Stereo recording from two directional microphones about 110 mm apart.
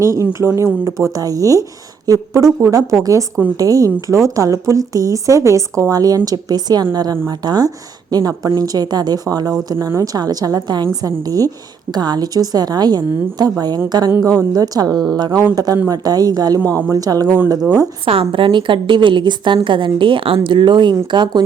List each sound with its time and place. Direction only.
0.0 s speech: 30° right (ahead or behind)
18.0 s a woman's voice: 55° right (ahead or behind)